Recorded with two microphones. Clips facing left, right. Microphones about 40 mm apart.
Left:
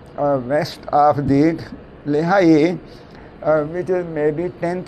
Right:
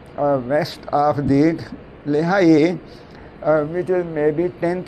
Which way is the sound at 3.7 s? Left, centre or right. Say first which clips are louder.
Even; right.